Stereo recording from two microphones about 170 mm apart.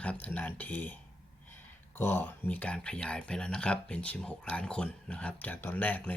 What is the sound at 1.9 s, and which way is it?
Speech, 10° left (ahead or behind).